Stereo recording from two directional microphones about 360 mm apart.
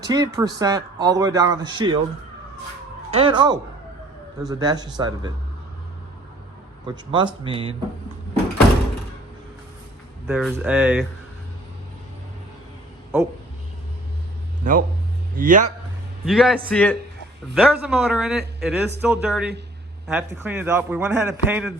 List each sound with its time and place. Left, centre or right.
0.0 s speech: centre
3.1 s speech: centre
6.8 s speech: centre
10.2 s a man's voice: centre
14.6 s a man's voice: right
16.2 s a man's voice: centre